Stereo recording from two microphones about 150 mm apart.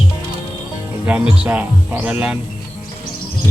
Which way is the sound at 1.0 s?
10° right (ahead or behind).